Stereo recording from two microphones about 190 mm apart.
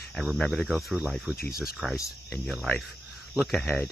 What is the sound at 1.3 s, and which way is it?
Speech, 50° left (ahead or behind).